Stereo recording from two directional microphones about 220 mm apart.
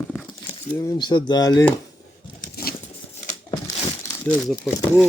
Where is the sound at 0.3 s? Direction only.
20° left (ahead or behind).